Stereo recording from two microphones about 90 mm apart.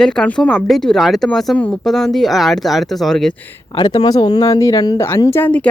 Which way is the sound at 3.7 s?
55° left (ahead or behind).